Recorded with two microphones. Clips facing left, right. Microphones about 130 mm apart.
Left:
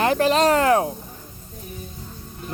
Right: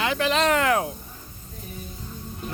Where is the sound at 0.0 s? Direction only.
45° left (ahead or behind).